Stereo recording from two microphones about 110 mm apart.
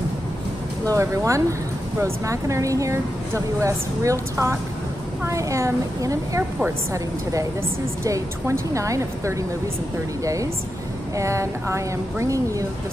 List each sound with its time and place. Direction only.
0.8 s speech: 30° right (ahead or behind)